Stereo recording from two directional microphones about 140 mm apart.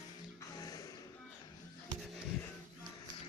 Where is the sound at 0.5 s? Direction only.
25° left (ahead or behind).